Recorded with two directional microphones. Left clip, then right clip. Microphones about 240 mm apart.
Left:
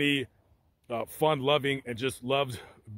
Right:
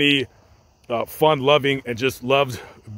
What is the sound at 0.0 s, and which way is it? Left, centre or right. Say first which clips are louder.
Speech: right 10 dB; centre.